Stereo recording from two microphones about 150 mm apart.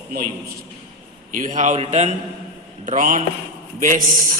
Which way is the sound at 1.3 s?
60° right (ahead or behind).